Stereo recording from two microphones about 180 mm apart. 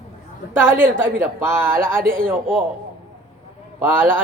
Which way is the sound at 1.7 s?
50° right (ahead or behind).